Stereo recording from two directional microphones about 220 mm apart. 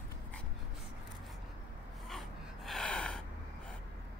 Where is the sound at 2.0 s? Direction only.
Centre (ahead or behind).